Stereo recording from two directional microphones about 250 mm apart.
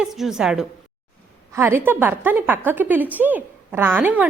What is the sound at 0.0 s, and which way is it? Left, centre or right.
A woman's voice, centre.